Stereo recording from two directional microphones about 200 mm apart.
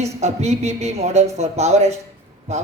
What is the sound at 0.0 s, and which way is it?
Speech, 35° right (ahead or behind).